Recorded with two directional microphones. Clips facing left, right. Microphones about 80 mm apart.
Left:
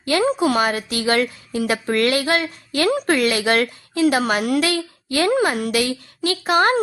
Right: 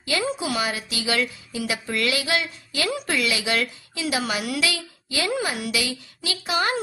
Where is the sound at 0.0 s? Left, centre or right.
Left.